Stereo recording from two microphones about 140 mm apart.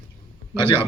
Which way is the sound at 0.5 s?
15° right (ahead or behind).